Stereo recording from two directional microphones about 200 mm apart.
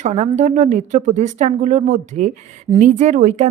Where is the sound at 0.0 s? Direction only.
35° right (ahead or behind).